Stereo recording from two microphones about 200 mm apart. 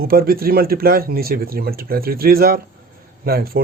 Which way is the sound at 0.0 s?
50° right (ahead or behind).